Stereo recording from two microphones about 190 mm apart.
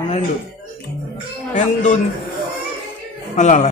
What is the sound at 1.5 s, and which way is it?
Speech, 40° left (ahead or behind).